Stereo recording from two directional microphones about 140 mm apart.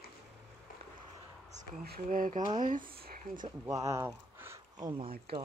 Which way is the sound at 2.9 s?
90° right.